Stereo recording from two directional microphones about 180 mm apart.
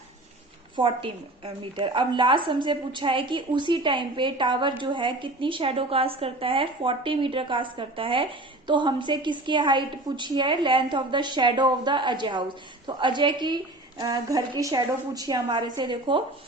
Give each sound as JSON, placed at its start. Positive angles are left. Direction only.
{"t": 0.8, "sound": "a woman's voice", "side_deg": -30}